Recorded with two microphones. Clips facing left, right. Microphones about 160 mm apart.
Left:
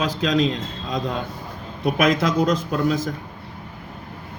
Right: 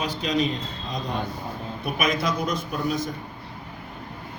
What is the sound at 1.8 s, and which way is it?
A man's voice, 90° left.